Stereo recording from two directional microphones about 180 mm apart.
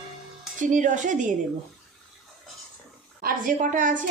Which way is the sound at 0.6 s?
45° right (ahead or behind).